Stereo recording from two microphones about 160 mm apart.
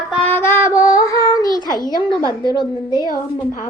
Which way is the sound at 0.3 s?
15° left (ahead or behind).